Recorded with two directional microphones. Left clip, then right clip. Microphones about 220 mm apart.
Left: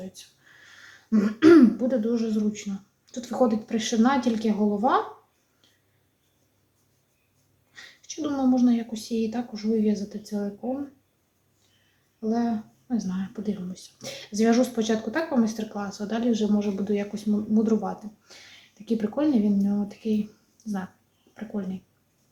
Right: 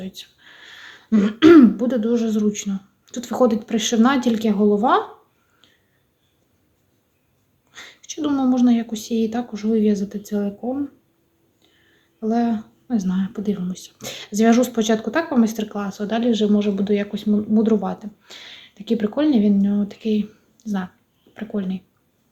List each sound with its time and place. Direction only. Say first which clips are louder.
0.1 s speech: right 9 dB; 30° right (ahead or behind)
7.7 s speech: right 5 dB; 30° right (ahead or behind)
12.3 s speech: right 6 dB; 35° right (ahead or behind)
21.3 s speech: right 7 dB; 25° right (ahead or behind)